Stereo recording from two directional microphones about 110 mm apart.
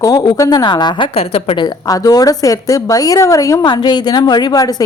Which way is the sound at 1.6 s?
35° left (ahead or behind).